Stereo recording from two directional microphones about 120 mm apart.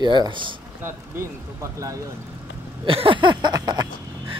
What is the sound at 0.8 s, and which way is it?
Speech, 20° right (ahead or behind).